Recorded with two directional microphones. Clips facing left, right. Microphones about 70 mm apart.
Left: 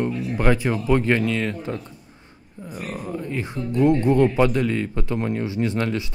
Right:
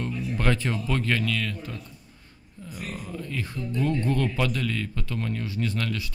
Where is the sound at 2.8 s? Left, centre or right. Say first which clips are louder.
Left 6 dB; left.